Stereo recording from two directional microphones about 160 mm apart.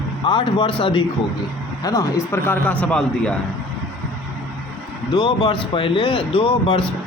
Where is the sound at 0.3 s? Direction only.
30° left (ahead or behind).